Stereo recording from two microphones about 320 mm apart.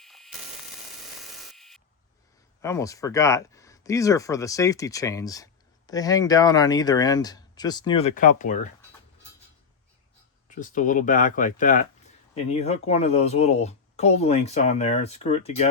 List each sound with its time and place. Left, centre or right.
0.0 s static: centre
1.2 s a sound: centre
2.6 s speech: centre; by 8.5 s left
10.5 s speech: left